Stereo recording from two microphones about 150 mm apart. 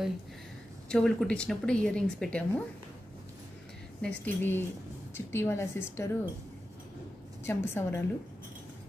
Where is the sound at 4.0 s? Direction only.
10° left (ahead or behind).